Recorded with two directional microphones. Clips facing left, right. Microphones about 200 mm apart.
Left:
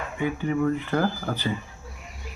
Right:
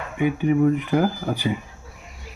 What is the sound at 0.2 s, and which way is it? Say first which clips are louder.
Speech: right 6 dB; 15° right (ahead or behind).